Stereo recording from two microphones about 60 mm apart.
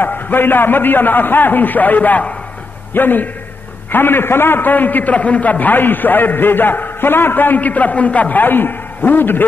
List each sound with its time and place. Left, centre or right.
0.0 s a man's voice: left